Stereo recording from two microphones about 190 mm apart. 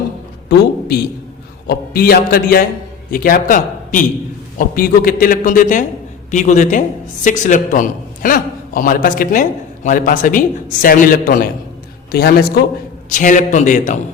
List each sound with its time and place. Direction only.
0.4 s a sound: 60° left (ahead or behind)
1.6 s a man's voice: 55° left (ahead or behind)
13.1 s a man's voice: 40° left (ahead or behind)